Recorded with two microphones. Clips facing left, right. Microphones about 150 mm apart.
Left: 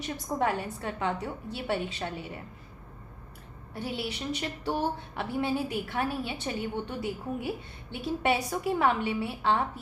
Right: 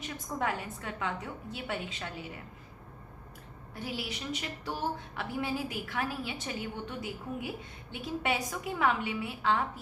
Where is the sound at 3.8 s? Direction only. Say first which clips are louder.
Left 4 dB; 30° left (ahead or behind).